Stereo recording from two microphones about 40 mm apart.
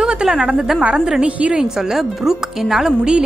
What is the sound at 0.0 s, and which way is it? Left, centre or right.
A woman's voice, centre.